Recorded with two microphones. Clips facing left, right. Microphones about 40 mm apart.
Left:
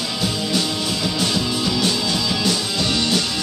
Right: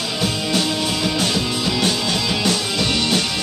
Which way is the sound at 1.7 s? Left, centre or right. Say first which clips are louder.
Right 2 dB; right.